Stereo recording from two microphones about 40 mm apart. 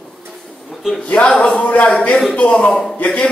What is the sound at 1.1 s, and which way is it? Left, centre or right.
Speech, left.